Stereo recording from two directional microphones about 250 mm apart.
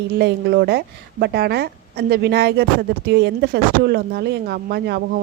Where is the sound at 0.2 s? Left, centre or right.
Right.